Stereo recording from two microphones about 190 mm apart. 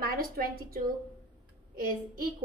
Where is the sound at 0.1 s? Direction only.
50° right (ahead or behind).